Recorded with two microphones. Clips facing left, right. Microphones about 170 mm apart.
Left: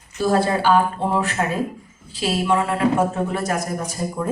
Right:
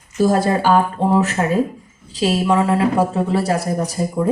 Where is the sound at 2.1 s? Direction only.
35° right (ahead or behind).